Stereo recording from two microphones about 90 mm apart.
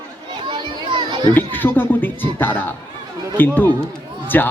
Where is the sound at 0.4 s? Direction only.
55° right (ahead or behind).